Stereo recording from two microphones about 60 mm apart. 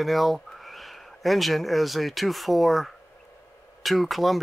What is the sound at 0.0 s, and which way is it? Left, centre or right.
Speech, centre.